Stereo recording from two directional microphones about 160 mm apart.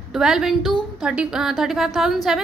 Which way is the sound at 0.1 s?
5° right (ahead or behind).